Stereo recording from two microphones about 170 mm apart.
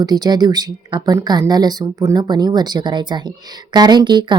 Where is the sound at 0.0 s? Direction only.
25° right (ahead or behind).